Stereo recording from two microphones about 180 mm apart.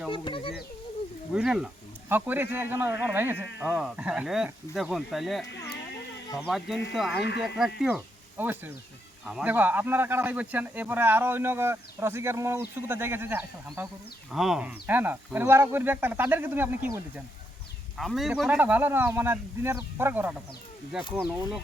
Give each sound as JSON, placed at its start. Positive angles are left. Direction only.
{"t": 0.1, "sound": "a sound", "side_deg": 30}
{"t": 1.3, "sound": "a man's voice", "side_deg": -5}
{"t": 7.2, "sound": "speech", "side_deg": 70}
{"t": 7.4, "sound": "a man's voice", "side_deg": 0}
{"t": 14.3, "sound": "a man's voice", "side_deg": 0}
{"t": 17.9, "sound": "a man's voice", "side_deg": 0}